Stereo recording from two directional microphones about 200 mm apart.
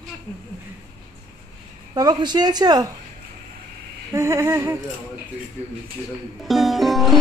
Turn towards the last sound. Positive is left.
turn(degrees=0)  # may be behind; listen again after turning